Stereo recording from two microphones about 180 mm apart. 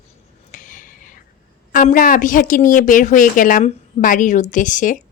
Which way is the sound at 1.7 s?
50° left (ahead or behind).